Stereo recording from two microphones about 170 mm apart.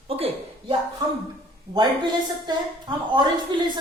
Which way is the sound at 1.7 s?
25° right (ahead or behind).